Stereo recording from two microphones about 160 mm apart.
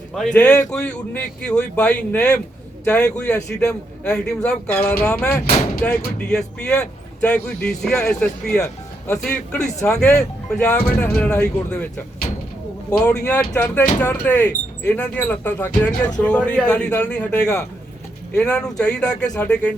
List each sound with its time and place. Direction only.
0.1 s speech: centre (ahead or behind)
12.2 s a sound: 40° left (ahead or behind)
12.9 s speech: 5° left (ahead or behind)